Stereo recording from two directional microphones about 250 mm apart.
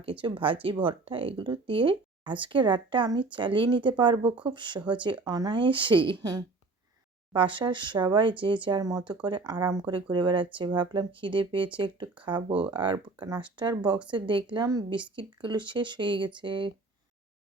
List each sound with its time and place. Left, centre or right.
0.0 s speech: right